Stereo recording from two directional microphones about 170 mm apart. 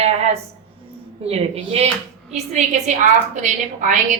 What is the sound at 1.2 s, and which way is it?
A woman's voice, 35° right (ahead or behind).